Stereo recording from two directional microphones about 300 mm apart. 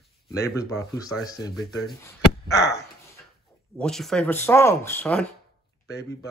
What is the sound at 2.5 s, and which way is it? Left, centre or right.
Speech, left.